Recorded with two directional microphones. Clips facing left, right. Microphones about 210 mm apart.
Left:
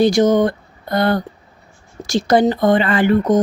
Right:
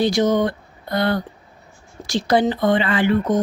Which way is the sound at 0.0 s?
45° left (ahead or behind).